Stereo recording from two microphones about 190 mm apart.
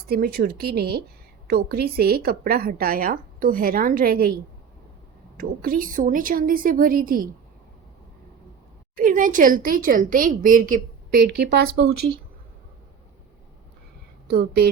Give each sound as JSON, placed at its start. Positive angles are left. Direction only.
{"t": 0.1, "sound": "a woman's voice", "side_deg": -55}
{"t": 5.4, "sound": "a woman's voice", "side_deg": -50}
{"t": 9.0, "sound": "a woman's voice", "side_deg": -45}
{"t": 14.3, "sound": "a woman's voice", "side_deg": -55}